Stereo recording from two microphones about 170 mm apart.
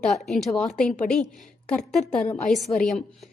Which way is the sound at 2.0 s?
40° left (ahead or behind).